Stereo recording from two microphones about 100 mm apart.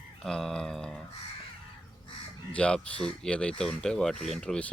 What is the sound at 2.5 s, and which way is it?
Speech, 10° left (ahead or behind).